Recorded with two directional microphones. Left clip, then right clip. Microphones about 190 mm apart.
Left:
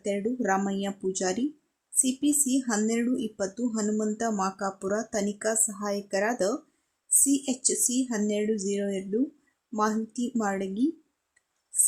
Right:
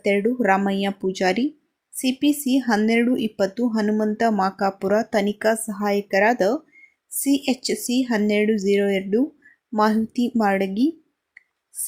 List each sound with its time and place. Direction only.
0.0 s speech: 15° right (ahead or behind)